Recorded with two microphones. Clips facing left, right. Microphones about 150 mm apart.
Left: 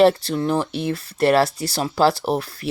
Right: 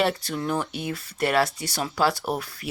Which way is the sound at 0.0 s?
30° left (ahead or behind).